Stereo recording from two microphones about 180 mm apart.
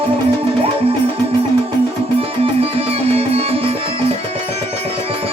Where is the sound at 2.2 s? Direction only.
35° right (ahead or behind).